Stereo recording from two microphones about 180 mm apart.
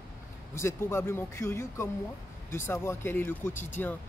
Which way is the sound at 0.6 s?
15° left (ahead or behind).